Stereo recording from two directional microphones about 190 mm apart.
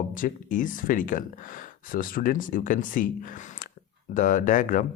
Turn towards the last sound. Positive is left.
turn(degrees=40)  # may be behind; listen again after turning